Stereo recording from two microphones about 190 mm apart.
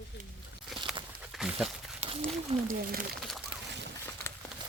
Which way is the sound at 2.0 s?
35° right (ahead or behind).